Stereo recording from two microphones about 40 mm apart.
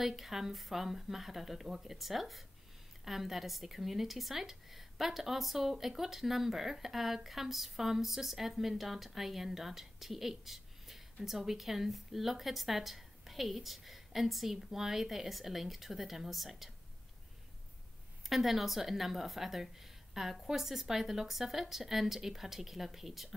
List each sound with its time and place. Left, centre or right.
0.0 s a woman's voice: centre
18.2 s a woman's voice: centre